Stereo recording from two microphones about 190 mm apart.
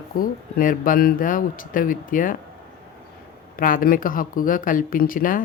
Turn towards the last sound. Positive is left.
turn(degrees=45)  # may be behind; listen again after turning